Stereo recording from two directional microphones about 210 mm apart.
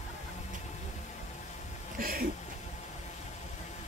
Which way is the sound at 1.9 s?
45° right (ahead or behind).